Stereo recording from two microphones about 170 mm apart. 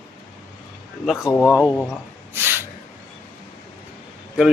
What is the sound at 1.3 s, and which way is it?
Speech, 20° left (ahead or behind).